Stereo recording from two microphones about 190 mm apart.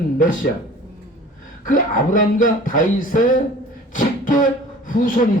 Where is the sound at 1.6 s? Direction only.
45° left (ahead or behind).